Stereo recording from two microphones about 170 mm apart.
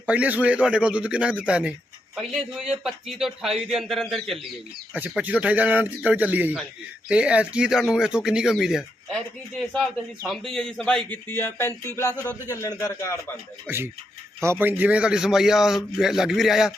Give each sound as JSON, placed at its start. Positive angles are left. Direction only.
{"t": 0.0, "sound": "a man's voice", "side_deg": -10}
{"t": 13.7, "sound": "a man's voice", "side_deg": -15}